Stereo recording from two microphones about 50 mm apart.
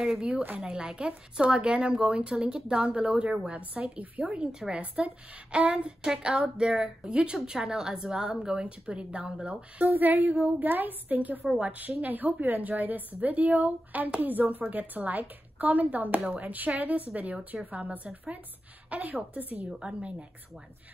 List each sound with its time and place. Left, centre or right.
0.6 s a woman's voice: centre
9.8 s a woman's voice: right
19.8 s a woman's voice: centre